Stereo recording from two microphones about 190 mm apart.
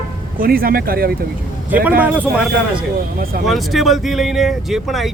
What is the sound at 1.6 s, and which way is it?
Speech, 10° right (ahead or behind).